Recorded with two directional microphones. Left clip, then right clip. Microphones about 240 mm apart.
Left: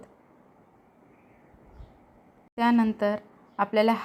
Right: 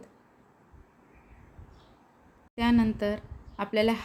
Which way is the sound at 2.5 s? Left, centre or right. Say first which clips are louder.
Left 3 dB; centre.